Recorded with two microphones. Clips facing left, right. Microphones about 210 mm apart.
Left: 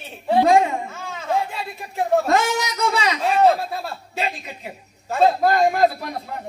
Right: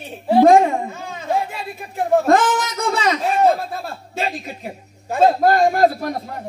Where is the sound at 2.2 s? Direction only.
50° right (ahead or behind).